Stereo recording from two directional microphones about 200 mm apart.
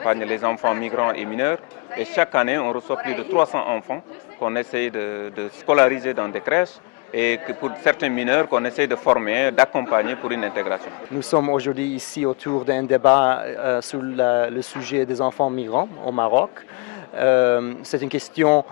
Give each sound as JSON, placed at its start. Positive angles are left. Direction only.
{"t": 0.0, "sound": "speech", "side_deg": 15}
{"t": 15.2, "sound": "speech", "side_deg": 25}